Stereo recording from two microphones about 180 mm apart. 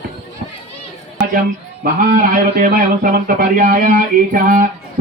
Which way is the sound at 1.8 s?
50° right (ahead or behind).